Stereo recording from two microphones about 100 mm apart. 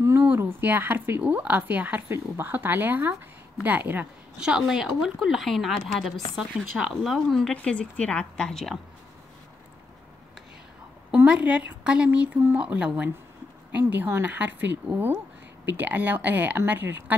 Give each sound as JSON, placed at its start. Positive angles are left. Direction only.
{"t": 0.0, "sound": "a sound", "side_deg": -25}
{"t": 0.3, "sound": "a woman's voice", "side_deg": -20}
{"t": 4.4, "sound": "a woman's voice", "side_deg": -5}
{"t": 11.1, "sound": "a woman's voice", "side_deg": -10}